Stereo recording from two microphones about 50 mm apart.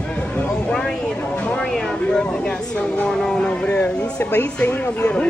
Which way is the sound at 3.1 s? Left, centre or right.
Centre.